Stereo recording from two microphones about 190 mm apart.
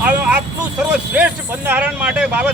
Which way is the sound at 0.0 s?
5° right (ahead or behind).